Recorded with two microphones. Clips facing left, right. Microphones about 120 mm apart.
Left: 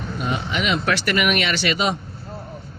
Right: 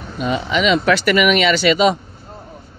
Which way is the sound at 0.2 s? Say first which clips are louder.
Right 7 dB; 90° right.